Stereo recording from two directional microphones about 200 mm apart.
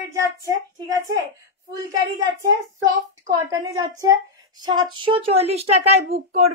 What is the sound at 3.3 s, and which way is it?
A woman's voice, 15° right (ahead or behind).